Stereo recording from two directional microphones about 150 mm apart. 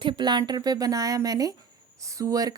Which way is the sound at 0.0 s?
30° right (ahead or behind).